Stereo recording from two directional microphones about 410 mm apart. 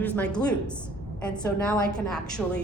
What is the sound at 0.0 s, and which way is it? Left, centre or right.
A woman's voice, centre.